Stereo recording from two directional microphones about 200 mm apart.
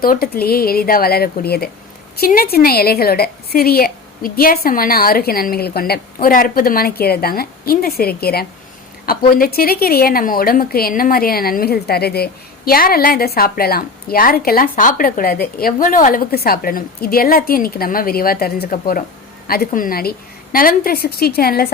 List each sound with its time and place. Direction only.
0.0 s a woman's voice: 45° left (ahead or behind)